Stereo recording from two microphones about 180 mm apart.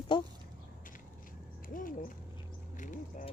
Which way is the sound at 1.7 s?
50° left (ahead or behind).